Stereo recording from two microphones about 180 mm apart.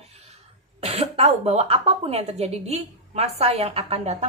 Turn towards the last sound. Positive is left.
turn(degrees=-40)  # may be behind; listen again after turning